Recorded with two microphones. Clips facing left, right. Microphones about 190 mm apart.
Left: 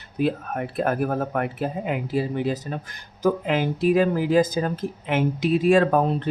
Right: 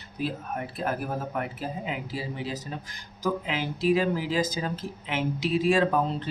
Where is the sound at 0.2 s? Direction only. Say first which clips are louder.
Left 7 dB; 60° left (ahead or behind).